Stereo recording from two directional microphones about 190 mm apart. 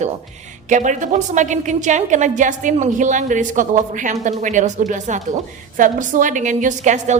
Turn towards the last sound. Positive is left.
turn(degrees=-40)  # may be behind; listen again after turning